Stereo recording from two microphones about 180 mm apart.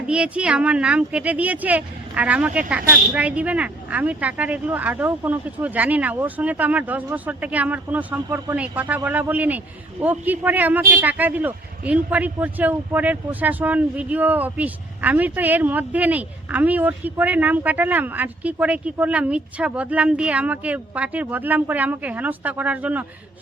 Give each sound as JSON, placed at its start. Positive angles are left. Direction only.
{"t": 0.1, "sound": "speech", "side_deg": -5}